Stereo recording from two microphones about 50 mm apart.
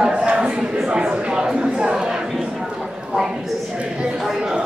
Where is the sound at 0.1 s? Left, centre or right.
Right.